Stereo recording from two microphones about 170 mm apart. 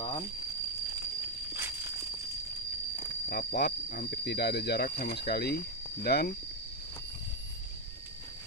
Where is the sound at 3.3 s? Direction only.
60° left (ahead or behind).